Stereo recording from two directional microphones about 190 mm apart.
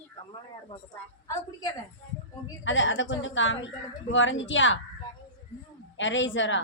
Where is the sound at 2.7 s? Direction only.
80° left.